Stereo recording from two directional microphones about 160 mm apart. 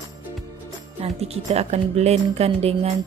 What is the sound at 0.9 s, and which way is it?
Speech, 40° right (ahead or behind).